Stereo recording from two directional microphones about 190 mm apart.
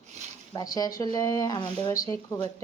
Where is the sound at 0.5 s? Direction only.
20° left (ahead or behind).